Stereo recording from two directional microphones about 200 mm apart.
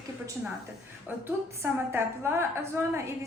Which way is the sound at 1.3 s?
10° right (ahead or behind).